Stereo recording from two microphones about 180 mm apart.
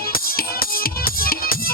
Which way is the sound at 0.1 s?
55° left (ahead or behind).